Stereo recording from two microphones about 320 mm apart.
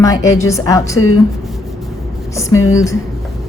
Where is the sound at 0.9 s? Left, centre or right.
Left.